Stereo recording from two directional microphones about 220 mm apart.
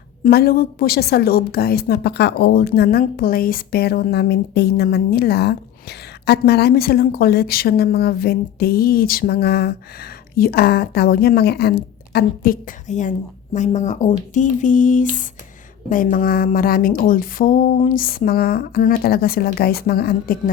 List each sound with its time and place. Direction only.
0.3 s a woman's voice: 45° left (ahead or behind)